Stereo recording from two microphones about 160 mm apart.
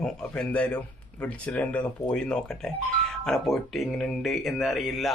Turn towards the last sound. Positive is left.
turn(degrees=0)  # may be behind; listen again after turning